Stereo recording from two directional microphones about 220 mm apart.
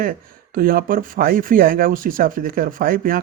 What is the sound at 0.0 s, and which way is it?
Speech, 40° right (ahead or behind).